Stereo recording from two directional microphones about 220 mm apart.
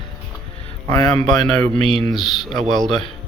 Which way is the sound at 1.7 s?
25° right (ahead or behind).